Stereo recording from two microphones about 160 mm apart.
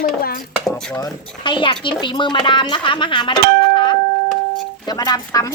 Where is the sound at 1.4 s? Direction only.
30° left (ahead or behind).